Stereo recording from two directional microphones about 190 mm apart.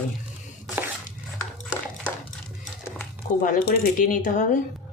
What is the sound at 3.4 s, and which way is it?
Speech, 45° left (ahead or behind).